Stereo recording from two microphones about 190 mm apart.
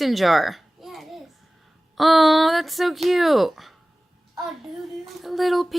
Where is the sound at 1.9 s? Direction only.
Centre (ahead or behind).